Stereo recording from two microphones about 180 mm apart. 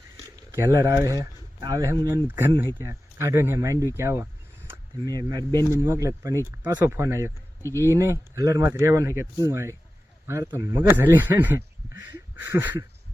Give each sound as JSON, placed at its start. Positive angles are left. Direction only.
{"t": 0.5, "sound": "speech", "side_deg": -15}
{"t": 7.6, "sound": "speech", "side_deg": 15}
{"t": 7.9, "sound": "speech", "side_deg": -15}